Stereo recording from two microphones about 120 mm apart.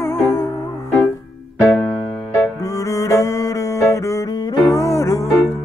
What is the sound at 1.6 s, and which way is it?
Music, 5° left (ahead or behind).